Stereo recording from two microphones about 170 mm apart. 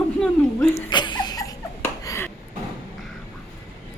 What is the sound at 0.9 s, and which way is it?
Laughter, 25° left (ahead or behind).